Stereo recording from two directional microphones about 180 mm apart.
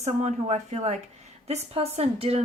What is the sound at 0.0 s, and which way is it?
A woman's voice, 40° right (ahead or behind).